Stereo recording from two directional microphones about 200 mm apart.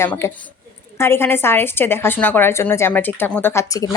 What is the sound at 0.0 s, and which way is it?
A woman's voice, 10° left (ahead or behind).